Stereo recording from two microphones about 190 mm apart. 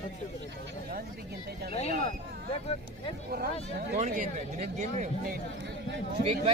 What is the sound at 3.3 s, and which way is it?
Speech, 55° right (ahead or behind).